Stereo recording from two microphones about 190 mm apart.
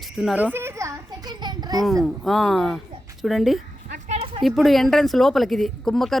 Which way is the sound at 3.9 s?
35° right (ahead or behind).